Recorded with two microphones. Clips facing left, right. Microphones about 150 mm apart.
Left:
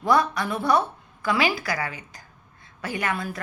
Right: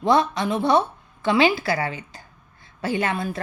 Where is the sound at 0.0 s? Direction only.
25° right (ahead or behind).